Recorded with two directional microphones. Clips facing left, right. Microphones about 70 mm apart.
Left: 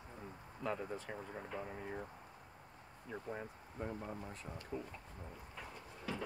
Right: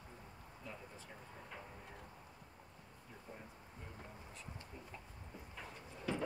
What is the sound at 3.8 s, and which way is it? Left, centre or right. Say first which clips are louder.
Speech: left 14 dB; left.